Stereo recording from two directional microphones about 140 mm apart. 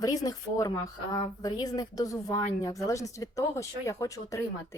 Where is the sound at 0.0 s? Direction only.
25° left (ahead or behind).